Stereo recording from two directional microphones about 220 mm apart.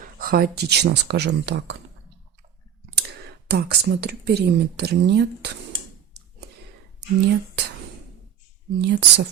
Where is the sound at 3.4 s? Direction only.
45° right (ahead or behind).